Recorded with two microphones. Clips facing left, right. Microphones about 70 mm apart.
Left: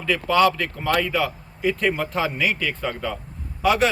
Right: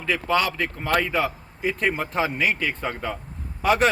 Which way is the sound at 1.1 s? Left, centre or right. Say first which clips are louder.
Left 1 dB; right.